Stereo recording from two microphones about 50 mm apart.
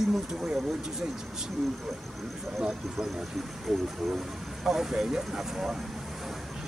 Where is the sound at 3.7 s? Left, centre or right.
Centre.